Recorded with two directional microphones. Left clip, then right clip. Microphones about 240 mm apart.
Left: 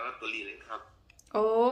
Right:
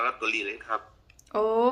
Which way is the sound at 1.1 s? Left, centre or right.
Centre.